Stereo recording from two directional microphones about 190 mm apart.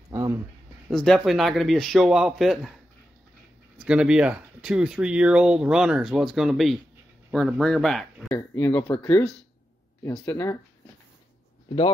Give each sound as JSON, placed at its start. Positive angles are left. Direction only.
{"t": 0.1, "sound": "a sound", "side_deg": -15}
{"t": 0.8, "sound": "speech", "side_deg": 0}
{"t": 3.8, "sound": "speech", "side_deg": -5}